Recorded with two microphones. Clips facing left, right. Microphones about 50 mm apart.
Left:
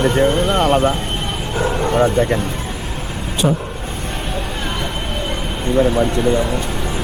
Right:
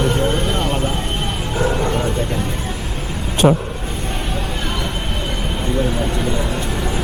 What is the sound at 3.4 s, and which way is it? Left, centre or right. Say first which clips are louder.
Speech: right 4 dB; right.